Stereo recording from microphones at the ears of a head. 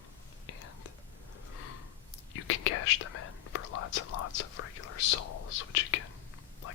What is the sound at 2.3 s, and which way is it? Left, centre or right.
Whispering, left.